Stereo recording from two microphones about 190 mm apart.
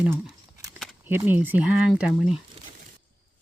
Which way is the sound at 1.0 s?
10° right (ahead or behind).